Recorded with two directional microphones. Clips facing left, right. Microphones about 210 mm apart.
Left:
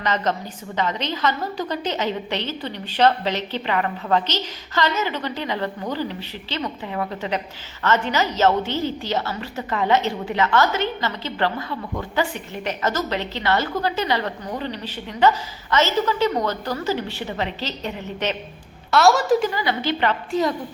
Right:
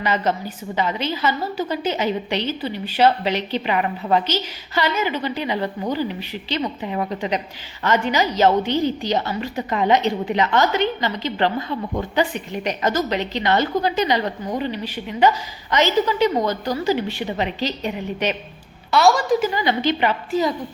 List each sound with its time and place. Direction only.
0.0 s a woman's voice: 10° right (ahead or behind)
18.9 s a woman's voice: centre (ahead or behind)
19.5 s a woman's voice: 20° right (ahead or behind)
20.3 s a woman's voice: centre (ahead or behind)